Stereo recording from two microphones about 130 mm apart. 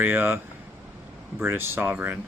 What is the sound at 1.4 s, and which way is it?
Speech, 15° right (ahead or behind).